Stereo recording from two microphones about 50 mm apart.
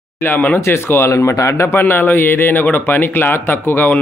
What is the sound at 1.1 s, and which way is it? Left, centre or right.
Speech, left.